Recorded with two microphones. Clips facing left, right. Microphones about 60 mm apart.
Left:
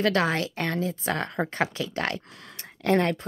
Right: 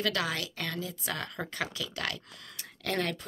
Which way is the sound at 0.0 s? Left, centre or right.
Left.